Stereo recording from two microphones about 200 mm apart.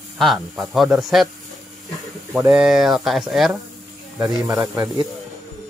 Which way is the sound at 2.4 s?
5° right (ahead or behind).